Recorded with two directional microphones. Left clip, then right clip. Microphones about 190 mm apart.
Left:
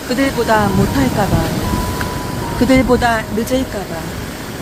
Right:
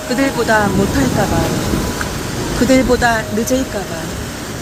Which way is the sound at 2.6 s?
15° left (ahead or behind).